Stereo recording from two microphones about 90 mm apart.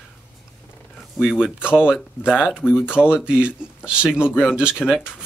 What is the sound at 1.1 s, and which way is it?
Speech, 5° right (ahead or behind).